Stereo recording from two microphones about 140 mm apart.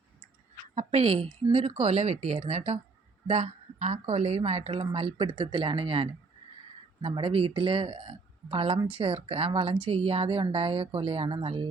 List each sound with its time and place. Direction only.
0.8 s a woman's voice: 45° right (ahead or behind)